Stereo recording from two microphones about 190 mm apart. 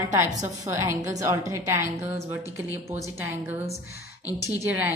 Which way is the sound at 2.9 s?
10° right (ahead or behind).